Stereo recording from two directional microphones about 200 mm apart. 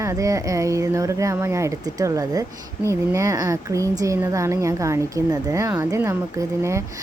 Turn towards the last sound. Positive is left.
turn(degrees=-15)  # may be behind; listen again after turning